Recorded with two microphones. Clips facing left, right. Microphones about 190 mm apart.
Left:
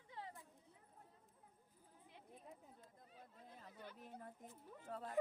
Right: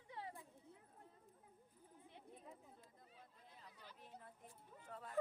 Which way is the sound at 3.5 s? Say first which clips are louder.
Left 5 dB; 50° left (ahead or behind).